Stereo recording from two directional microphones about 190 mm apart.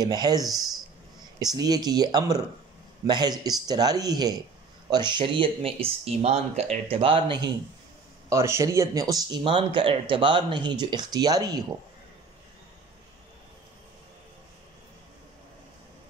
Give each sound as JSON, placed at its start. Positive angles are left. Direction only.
{"t": 0.0, "sound": "speech", "side_deg": -20}
{"t": 8.3, "sound": "speech", "side_deg": -15}